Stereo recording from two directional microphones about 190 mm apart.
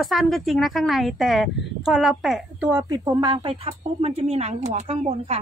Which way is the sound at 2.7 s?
15° right (ahead or behind).